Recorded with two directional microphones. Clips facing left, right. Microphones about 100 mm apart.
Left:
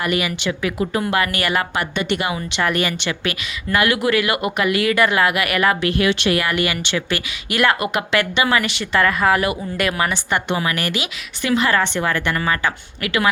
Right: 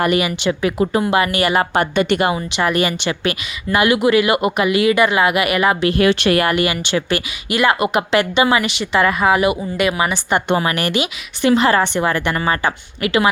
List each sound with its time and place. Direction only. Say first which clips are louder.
0.1 s a woman's voice: right 4 dB; 20° right (ahead or behind)
1.7 s a woman's voice: right 6 dB; 40° right (ahead or behind)
2.5 s speech: right 3 dB; 15° right (ahead or behind)
6.0 s speech: right 4 dB; 45° right (ahead or behind)
6.5 s a woman's voice: right 3 dB; 20° right (ahead or behind)
7.5 s speech: right 2 dB; 10° right (ahead or behind)
7.8 s speech: right 4 dB; 20° right (ahead or behind)
10.5 s a woman's voice: right 5 dB; 35° right (ahead or behind)
10.8 s a woman's voice: right 5 dB; 20° right (ahead or behind)
11.8 s a woman's voice: right 3 dB; 15° right (ahead or behind)